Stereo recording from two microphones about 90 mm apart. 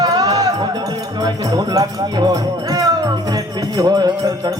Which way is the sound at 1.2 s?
45° right (ahead or behind).